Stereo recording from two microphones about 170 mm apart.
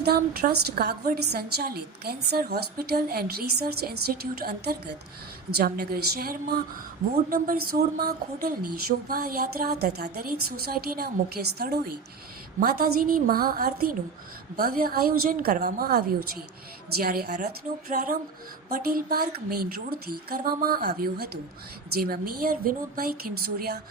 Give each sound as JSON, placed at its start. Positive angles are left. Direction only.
{"t": 0.0, "sound": "speech", "side_deg": -65}
{"t": 17.9, "sound": "speech", "side_deg": -55}